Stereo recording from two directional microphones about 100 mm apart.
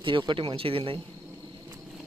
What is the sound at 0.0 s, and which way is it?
Speech, 55° right (ahead or behind).